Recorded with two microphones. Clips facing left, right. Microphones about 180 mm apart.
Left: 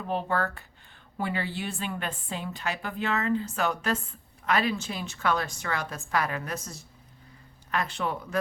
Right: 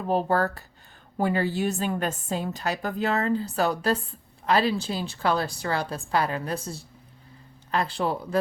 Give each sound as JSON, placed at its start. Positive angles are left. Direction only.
{"t": 0.1, "sound": "a woman's voice", "side_deg": -40}